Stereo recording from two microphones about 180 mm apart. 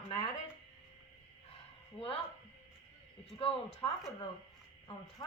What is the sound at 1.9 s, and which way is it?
Speech, 30° left (ahead or behind).